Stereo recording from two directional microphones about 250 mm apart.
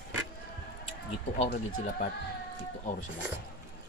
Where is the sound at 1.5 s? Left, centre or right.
Left.